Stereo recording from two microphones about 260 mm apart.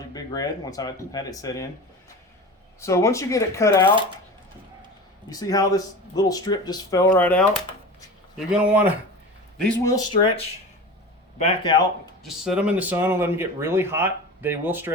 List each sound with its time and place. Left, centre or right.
0.1 s speech: centre
2.8 s speech: centre
5.3 s speech: centre
9.9 s speech: centre
12.2 s speech: centre